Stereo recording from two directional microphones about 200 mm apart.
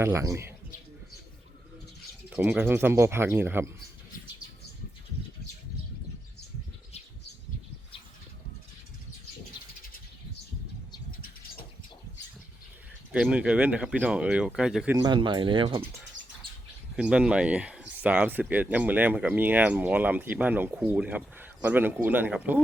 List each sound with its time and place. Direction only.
0.0 s speech: 15° right (ahead or behind)
2.3 s speech: 10° right (ahead or behind)
13.1 s speech: 5° right (ahead or behind)
14.9 s speech: 20° right (ahead or behind)
17.0 s speech: 5° right (ahead or behind)